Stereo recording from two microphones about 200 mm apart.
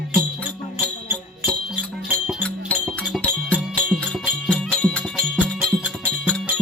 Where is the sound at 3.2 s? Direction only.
5° left (ahead or behind).